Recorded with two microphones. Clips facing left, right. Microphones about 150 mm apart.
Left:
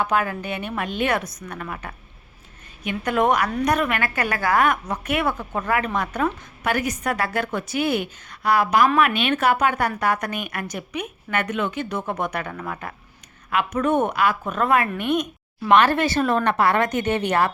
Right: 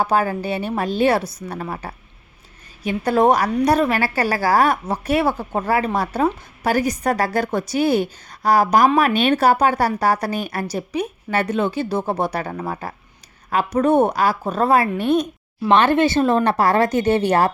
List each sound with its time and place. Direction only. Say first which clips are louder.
0.0 s a woman's voice: right 4 dB; 35° right (ahead or behind)